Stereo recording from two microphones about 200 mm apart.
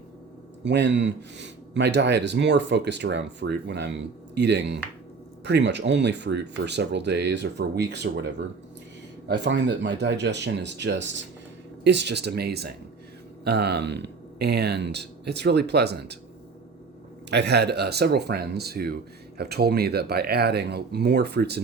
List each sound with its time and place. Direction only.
0.6 s speech: 60° right (ahead or behind)
17.2 s speech: 55° right (ahead or behind)